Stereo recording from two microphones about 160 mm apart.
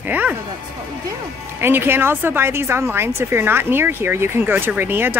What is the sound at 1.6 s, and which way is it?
Speech, 15° right (ahead or behind).